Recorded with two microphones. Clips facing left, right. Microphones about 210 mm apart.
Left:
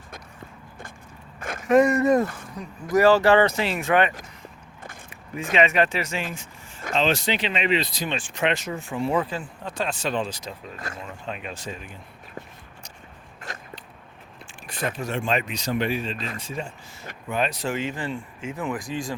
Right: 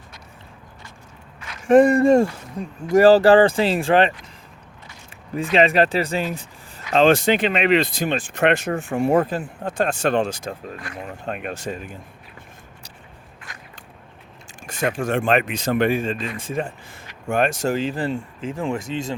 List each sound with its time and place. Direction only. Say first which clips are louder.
1.4 s a sound: left 7 dB; 50° left (ahead or behind)
1.6 s speech: right 5 dB; 30° right (ahead or behind)
5.3 s speech: right 4 dB; 35° right (ahead or behind)
6.9 s speech: right 8 dB; 50° right (ahead or behind); by 9.0 s 70° right (ahead or behind)
9.0 s speech: right 6 dB; 50° right (ahead or behind)
14.7 s speech: right 6 dB; 45° right (ahead or behind)
17.7 s speech: right 5 dB; 35° right (ahead or behind)